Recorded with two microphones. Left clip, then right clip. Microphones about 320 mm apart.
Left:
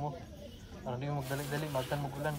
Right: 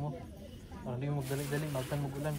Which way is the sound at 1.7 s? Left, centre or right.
Left.